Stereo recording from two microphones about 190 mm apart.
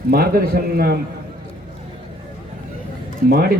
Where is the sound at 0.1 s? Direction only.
50° right (ahead or behind).